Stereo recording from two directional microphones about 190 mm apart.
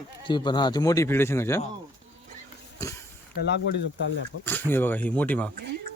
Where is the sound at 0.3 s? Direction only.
25° left (ahead or behind).